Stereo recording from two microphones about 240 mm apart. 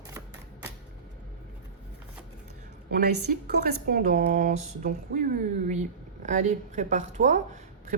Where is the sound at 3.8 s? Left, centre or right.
Right.